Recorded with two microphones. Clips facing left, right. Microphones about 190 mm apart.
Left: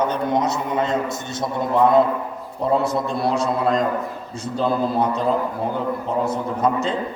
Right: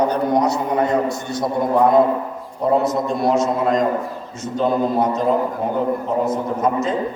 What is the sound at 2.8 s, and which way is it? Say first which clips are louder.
Speech: right 3 dB; 30° left (ahead or behind).